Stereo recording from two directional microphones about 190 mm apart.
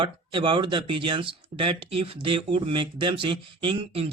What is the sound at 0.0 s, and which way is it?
Speech, 25° right (ahead or behind).